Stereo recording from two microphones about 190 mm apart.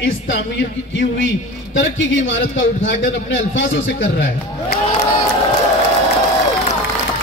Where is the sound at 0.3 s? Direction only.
70° left (ahead or behind).